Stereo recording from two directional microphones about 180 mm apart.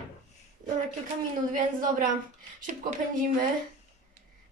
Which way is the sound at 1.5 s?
50° right (ahead or behind).